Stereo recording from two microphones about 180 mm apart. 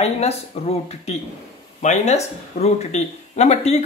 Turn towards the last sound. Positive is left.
turn(degrees=40)  # may be behind; listen again after turning